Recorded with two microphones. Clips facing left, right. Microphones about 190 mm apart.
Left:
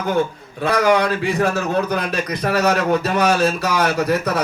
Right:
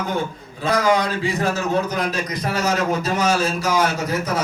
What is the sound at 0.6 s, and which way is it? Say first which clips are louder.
A man's voice: left 2 dB; 60° left (ahead or behind).